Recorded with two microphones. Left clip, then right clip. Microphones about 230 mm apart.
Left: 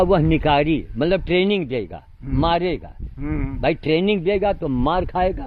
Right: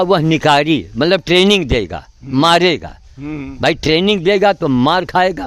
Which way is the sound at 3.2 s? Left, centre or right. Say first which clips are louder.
Right 2 dB; centre.